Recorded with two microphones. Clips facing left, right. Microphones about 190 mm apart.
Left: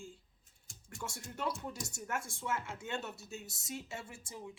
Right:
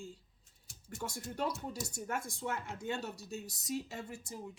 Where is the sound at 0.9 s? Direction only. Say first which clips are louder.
Right 4 dB; 40° right (ahead or behind).